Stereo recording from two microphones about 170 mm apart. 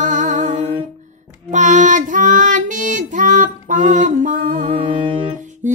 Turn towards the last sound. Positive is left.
turn(degrees=-45)  # may be behind; listen again after turning